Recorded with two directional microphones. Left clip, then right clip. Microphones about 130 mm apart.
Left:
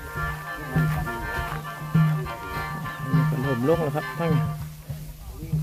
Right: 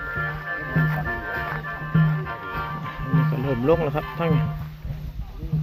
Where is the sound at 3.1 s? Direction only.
20° left (ahead or behind).